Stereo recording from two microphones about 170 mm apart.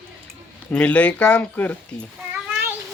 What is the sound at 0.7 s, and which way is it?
Speech, 10° left (ahead or behind).